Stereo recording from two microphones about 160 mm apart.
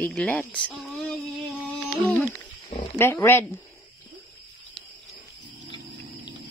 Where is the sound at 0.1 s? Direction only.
10° left (ahead or behind).